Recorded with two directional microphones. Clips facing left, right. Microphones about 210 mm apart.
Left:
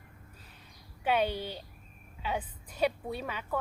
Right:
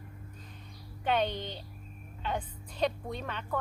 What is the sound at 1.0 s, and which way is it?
A woman's voice, 10° left (ahead or behind).